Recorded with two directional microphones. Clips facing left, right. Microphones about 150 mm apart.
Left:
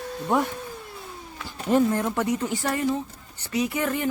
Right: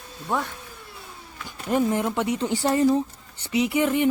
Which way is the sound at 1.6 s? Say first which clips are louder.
Left 1 dB; 15° right (ahead or behind).